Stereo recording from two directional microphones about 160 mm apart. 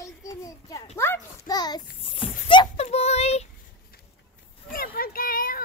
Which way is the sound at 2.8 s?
45° left (ahead or behind).